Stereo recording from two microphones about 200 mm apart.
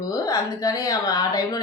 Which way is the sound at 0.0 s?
20° left (ahead or behind).